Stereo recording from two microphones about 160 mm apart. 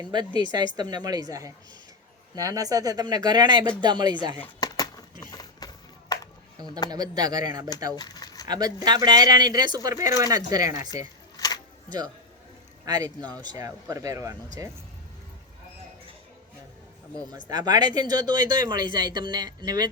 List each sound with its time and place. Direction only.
0.0 s speech: 25° right (ahead or behind)
4.6 s a sound: 25° left (ahead or behind)
6.7 s speech: 25° left (ahead or behind)
6.9 s speech: 25° right (ahead or behind)
7.9 s a sound: 25° left (ahead or behind)
8.4 s speech: 25° right (ahead or behind)
11.3 s a sound: 25° left (ahead or behind)
11.9 s a man's voice: 25° right (ahead or behind)
17.5 s speech: 25° right (ahead or behind)